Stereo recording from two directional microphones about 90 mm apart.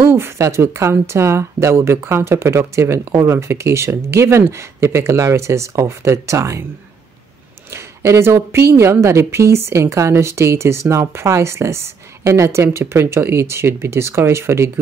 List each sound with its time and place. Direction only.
0.0 s speech: 25° right (ahead or behind)
7.7 s speech: 30° right (ahead or behind)